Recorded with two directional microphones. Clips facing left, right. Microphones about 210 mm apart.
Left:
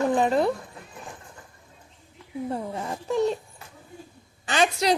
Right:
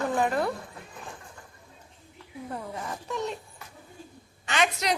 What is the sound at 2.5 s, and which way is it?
A woman's voice, 30° left (ahead or behind).